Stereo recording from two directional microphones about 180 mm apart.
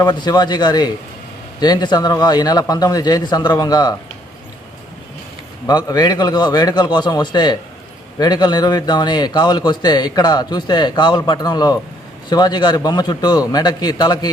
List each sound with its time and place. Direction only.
0.0 s a man's voice: 25° left (ahead or behind)
5.6 s a man's voice: 20° left (ahead or behind)